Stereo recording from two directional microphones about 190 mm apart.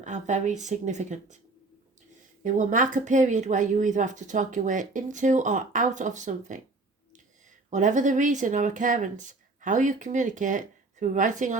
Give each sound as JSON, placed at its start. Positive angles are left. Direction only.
{"t": 0.0, "sound": "speech", "side_deg": -40}
{"t": 2.4, "sound": "speech", "side_deg": -40}
{"t": 7.7, "sound": "speech", "side_deg": -40}